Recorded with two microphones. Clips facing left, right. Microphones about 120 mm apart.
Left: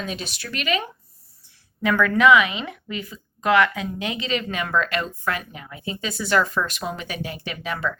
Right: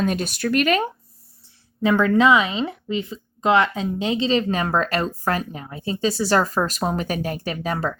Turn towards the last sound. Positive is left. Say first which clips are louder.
# right 3 dB
turn(degrees=-40)  # may be behind; listen again after turning